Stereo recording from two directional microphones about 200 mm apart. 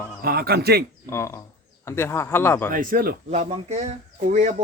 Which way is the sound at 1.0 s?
10° left (ahead or behind).